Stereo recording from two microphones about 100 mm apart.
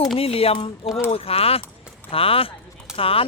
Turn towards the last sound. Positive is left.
turn(degrees=70)  # may be behind; listen again after turning